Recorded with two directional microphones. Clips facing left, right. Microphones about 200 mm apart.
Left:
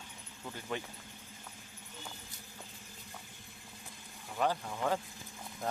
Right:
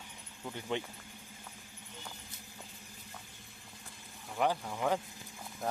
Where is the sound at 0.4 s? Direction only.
15° right (ahead or behind).